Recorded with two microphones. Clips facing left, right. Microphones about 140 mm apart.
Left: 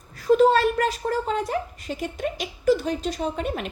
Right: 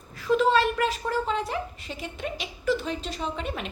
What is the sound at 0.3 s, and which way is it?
A woman's voice, 45° left (ahead or behind).